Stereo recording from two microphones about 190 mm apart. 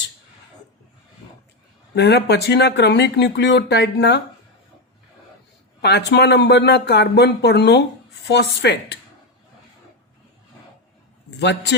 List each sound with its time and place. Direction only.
2.0 s speech: 60° left (ahead or behind)
5.8 s speech: 60° left (ahead or behind)
11.3 s speech: 65° left (ahead or behind)